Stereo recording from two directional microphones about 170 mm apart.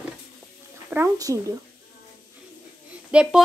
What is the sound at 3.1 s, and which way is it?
Speech, 5° right (ahead or behind).